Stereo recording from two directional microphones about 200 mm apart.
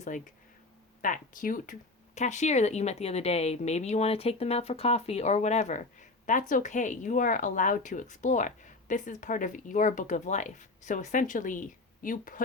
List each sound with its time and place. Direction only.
1.0 s speech: 40° left (ahead or behind)